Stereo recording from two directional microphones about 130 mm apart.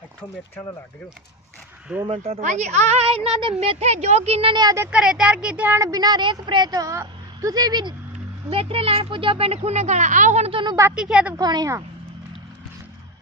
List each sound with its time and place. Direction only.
2.0 s speech: 45° right (ahead or behind)
2.4 s a woman's voice: 65° right (ahead or behind); by 4.5 s 50° right (ahead or behind)
4.5 s a woman's voice: 30° right (ahead or behind)
4.8 s speech: 5° right (ahead or behind)
5.8 s a woman's voice: 30° right (ahead or behind)
8.4 s speech: 45° right (ahead or behind); by 10.5 s 65° right (ahead or behind)
10.5 s a woman's voice: 40° right (ahead or behind)
10.9 s speech: 5° right (ahead or behind)
11.3 s a woman's voice: 30° right (ahead or behind)